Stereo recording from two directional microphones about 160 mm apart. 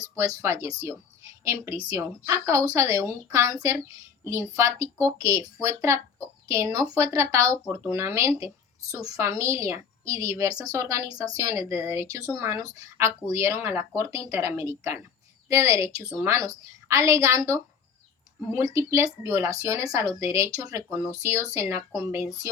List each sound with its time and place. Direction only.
0.0 s speech: 20° right (ahead or behind)